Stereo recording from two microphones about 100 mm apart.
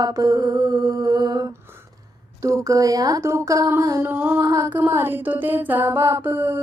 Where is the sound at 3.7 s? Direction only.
30° right (ahead or behind).